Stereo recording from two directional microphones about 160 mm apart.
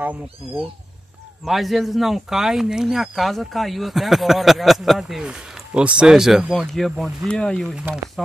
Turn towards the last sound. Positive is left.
turn(degrees=5)  # may be behind; listen again after turning